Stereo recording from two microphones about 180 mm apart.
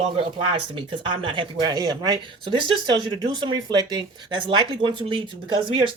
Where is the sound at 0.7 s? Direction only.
30° right (ahead or behind).